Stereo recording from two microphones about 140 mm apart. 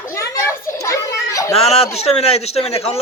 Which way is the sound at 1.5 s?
50° left (ahead or behind).